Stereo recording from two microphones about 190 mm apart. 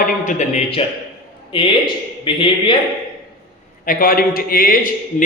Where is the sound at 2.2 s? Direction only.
25° left (ahead or behind).